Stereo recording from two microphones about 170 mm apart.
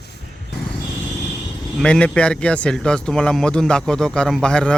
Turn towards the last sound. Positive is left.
turn(degrees=5)  # may be behind; listen again after turning